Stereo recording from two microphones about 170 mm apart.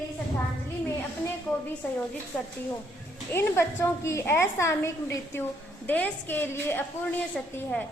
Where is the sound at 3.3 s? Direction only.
15° left (ahead or behind).